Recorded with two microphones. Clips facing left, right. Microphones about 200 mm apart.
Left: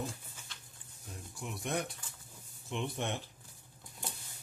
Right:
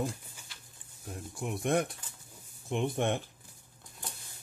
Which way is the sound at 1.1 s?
55° right (ahead or behind).